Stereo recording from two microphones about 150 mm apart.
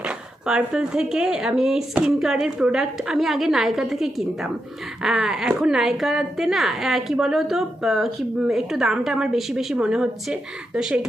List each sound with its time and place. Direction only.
0.4 s a woman's voice: 5° right (ahead or behind)